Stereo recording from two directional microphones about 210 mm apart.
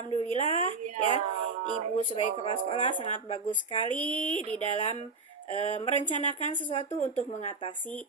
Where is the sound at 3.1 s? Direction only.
30° left (ahead or behind).